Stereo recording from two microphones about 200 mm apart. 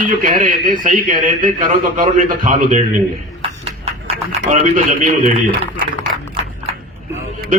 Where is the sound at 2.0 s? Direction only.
40° right (ahead or behind).